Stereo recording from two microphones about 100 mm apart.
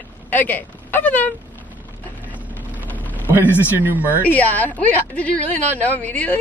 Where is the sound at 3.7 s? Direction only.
20° right (ahead or behind).